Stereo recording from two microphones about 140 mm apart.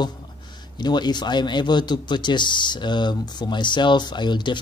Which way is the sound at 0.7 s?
30° left (ahead or behind).